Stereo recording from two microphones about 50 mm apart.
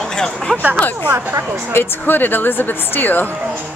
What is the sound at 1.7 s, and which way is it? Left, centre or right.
Speech, left.